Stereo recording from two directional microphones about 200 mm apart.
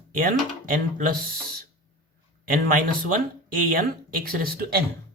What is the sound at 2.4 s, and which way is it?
Speech, 45° right (ahead or behind).